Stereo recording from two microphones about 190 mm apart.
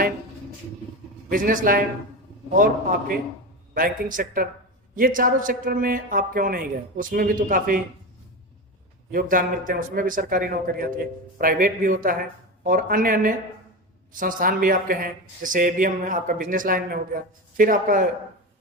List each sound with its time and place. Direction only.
1.3 s speech: 45° right (ahead or behind)
3.8 s speech: 45° right (ahead or behind)
9.1 s speech: 45° right (ahead or behind)